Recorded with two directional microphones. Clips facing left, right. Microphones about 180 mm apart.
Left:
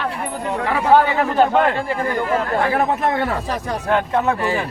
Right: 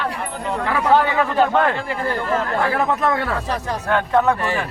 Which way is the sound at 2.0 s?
20° left (ahead or behind).